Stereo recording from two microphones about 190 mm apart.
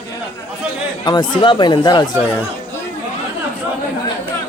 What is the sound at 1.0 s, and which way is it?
Speech, 20° left (ahead or behind).